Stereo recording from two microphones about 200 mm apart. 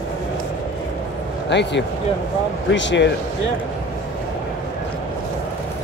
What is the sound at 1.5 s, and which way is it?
Speech, 60° left (ahead or behind).